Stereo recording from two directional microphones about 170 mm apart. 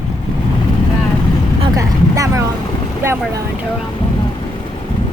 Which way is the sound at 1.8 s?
20° right (ahead or behind).